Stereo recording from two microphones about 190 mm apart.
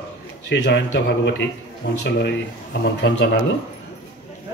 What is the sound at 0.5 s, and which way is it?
A man's voice, 65° left (ahead or behind).